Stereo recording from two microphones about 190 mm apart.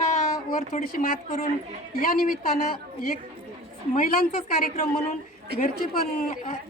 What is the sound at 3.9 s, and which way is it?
Speech, 50° left (ahead or behind).